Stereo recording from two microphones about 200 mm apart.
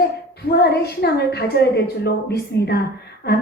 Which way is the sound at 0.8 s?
55° left (ahead or behind).